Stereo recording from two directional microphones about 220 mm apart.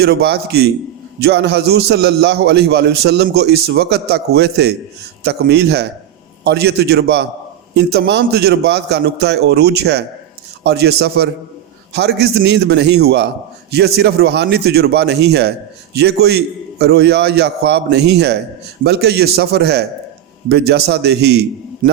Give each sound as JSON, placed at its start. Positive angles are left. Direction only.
{"t": 0.0, "sound": "a man's voice", "side_deg": -45}
{"t": 21.8, "sound": "a man's voice", "side_deg": -40}